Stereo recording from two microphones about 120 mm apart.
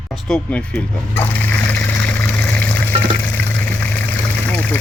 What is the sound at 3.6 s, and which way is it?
Water, 15° left (ahead or behind).